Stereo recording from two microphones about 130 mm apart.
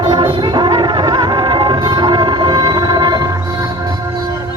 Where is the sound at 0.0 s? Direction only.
40° right (ahead or behind).